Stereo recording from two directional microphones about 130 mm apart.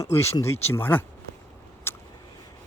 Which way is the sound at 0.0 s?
20° left (ahead or behind).